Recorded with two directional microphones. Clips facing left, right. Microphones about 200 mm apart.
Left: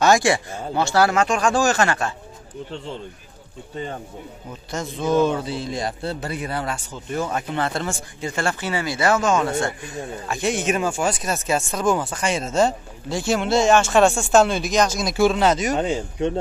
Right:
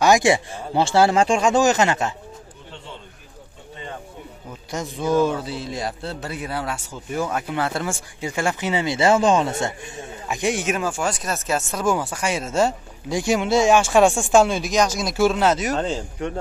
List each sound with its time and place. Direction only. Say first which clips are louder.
0.0 s speech: right 1 dB; 20° right (ahead or behind)
4.6 s a man's voice: even; 15° right (ahead or behind)
15.7 s speech: left 2 dB; 15° left (ahead or behind)